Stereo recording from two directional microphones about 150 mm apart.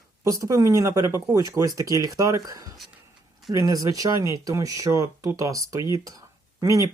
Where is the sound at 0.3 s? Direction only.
20° right (ahead or behind).